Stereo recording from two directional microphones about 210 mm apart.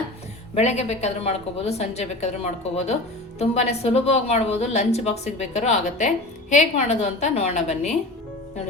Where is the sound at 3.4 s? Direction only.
30° left (ahead or behind).